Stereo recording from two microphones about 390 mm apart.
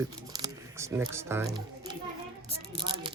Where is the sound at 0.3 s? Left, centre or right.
Centre.